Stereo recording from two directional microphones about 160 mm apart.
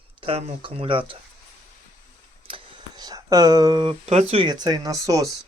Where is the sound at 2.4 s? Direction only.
30° right (ahead or behind).